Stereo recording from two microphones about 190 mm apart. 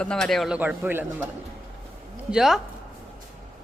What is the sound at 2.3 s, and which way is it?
Speech, centre (ahead or behind).